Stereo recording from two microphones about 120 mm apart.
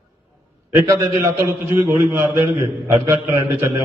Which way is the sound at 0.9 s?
25° right (ahead or behind).